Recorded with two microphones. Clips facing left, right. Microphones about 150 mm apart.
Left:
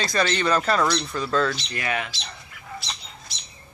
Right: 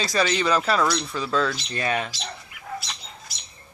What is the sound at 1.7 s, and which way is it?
Speech, 30° right (ahead or behind).